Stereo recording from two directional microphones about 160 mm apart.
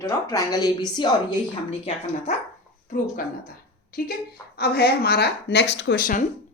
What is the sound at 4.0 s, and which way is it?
Speech, 65° left (ahead or behind).